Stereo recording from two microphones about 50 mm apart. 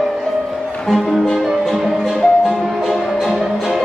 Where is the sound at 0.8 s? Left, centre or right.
Centre.